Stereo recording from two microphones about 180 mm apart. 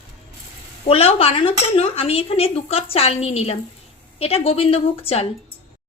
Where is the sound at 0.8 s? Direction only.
30° left (ahead or behind).